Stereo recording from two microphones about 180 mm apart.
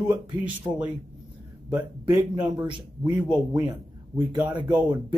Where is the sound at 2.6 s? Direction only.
25° right (ahead or behind).